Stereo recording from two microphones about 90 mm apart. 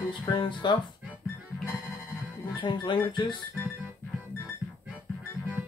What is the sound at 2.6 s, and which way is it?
Speech, 55° left (ahead or behind).